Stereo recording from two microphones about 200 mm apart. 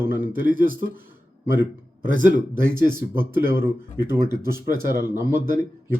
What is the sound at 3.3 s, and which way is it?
Speech, 10° right (ahead or behind).